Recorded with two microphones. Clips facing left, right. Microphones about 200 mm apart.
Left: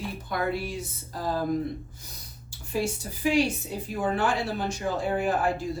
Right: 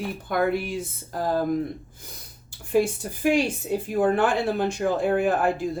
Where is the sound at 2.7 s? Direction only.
55° right (ahead or behind).